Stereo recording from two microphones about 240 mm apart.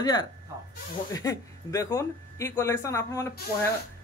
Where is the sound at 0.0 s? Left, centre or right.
Centre.